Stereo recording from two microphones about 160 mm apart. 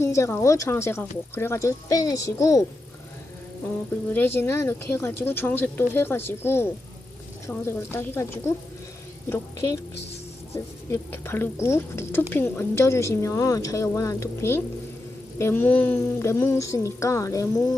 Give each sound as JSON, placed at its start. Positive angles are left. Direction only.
{"t": 0.0, "sound": "speech", "side_deg": 15}
{"t": 4.1, "sound": "speech", "side_deg": 10}